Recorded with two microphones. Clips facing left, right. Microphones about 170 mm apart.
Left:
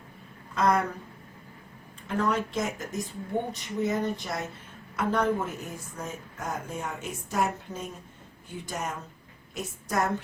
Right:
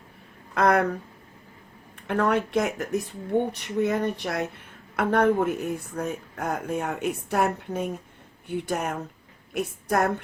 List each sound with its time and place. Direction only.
0.5 s speech: 65° right (ahead or behind)
2.0 s speech: 65° right (ahead or behind)